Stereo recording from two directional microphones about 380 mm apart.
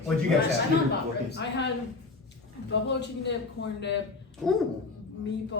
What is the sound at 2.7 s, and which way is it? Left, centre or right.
Speech, left.